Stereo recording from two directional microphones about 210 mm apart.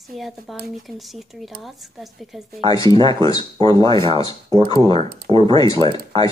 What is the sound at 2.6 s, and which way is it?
Speech, 20° left (ahead or behind).